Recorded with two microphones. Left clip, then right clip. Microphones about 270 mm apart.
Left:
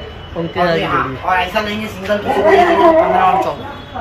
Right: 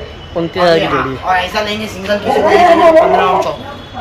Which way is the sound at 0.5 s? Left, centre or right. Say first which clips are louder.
Right 5 dB; centre.